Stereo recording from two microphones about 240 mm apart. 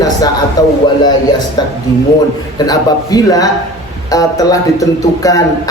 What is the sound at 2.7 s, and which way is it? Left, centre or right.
A man's voice, centre.